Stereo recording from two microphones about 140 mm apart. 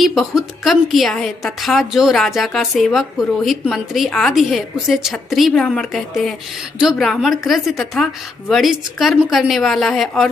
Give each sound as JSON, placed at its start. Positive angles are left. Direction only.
{"t": 0.0, "sound": "a woman's voice", "side_deg": 0}